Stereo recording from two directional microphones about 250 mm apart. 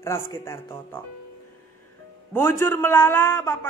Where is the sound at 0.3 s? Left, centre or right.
Centre.